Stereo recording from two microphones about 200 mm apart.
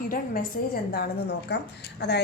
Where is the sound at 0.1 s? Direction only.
45° left (ahead or behind).